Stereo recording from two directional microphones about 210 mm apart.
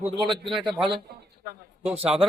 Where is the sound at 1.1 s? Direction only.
45° right (ahead or behind).